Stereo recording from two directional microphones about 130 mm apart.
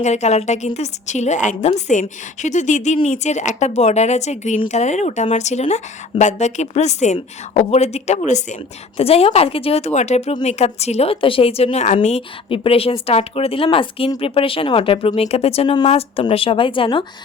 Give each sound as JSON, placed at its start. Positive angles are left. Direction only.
{"t": 0.0, "sound": "a woman's voice", "side_deg": 60}
{"t": 9.0, "sound": "speech", "side_deg": 50}